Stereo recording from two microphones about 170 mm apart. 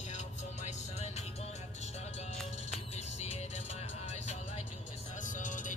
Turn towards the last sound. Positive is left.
turn(degrees=50)  # may be behind; listen again after turning